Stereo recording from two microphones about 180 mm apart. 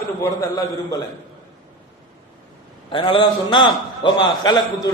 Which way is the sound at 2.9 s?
30° left (ahead or behind).